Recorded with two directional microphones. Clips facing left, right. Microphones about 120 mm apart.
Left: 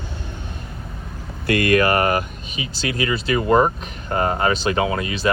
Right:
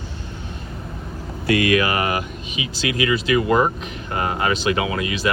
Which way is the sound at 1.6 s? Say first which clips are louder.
Left 2 dB; 45° left (ahead or behind).